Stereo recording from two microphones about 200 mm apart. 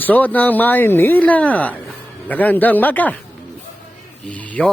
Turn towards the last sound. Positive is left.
turn(degrees=5)  # may be behind; listen again after turning